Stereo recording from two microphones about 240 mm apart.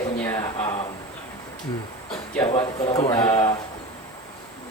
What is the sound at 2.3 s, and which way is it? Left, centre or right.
Speech, centre.